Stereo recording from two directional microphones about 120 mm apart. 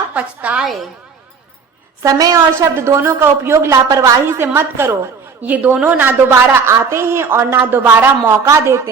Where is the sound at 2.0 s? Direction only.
30° right (ahead or behind).